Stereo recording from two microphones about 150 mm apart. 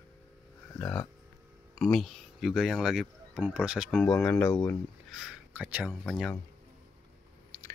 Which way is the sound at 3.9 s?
10° left (ahead or behind).